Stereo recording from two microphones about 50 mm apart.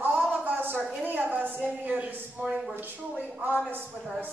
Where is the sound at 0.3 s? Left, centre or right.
Right.